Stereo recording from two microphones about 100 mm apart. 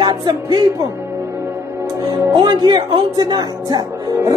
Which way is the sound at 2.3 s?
50° right (ahead or behind).